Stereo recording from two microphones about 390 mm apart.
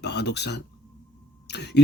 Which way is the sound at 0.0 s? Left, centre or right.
Left.